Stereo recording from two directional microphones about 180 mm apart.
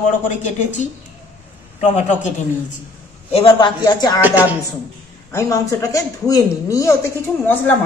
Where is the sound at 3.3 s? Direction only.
30° left (ahead or behind).